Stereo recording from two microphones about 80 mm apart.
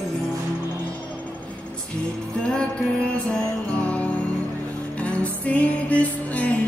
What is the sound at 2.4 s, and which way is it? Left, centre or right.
Music, centre.